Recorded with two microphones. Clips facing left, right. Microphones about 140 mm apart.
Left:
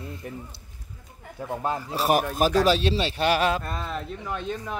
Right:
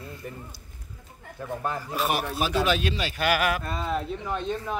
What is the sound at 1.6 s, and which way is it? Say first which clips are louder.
Speech: left 3 dB; 20° left (ahead or behind).